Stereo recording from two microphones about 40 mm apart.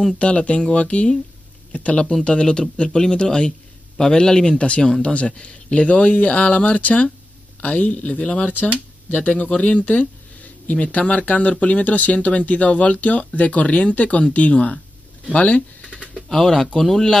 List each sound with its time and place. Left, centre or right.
0.2 s speech: left
2.2 s speech: left
4.6 s speech: left
15.3 s a sound: left
16.2 s speech: centre